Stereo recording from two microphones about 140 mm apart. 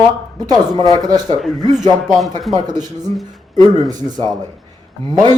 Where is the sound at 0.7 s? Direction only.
25° left (ahead or behind).